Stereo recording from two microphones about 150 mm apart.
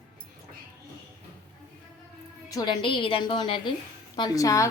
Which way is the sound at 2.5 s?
25° left (ahead or behind).